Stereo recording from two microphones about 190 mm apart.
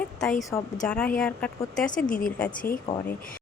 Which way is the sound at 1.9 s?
45° left (ahead or behind).